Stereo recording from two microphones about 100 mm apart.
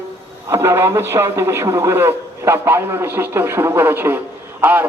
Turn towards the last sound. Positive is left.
turn(degrees=-20)  # may be behind; listen again after turning